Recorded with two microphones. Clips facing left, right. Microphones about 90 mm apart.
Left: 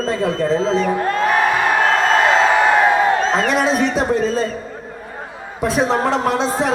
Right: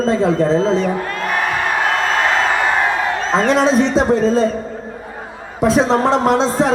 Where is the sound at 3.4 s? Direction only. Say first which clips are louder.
Right 3 dB; 25° right (ahead or behind).